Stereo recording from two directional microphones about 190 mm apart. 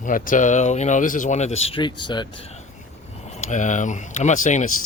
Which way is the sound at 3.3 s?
40° left (ahead or behind).